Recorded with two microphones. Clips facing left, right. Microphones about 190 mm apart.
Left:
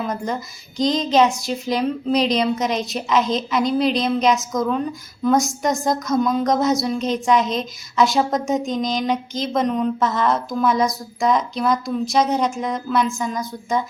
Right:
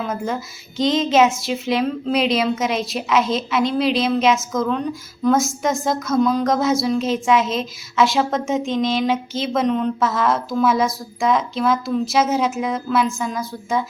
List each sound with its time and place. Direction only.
0.0 s a woman's voice: centre (ahead or behind)